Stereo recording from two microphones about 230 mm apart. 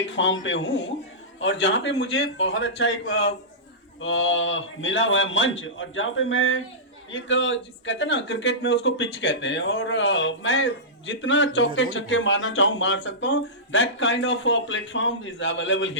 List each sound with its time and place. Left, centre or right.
0.0 s a man's voice: left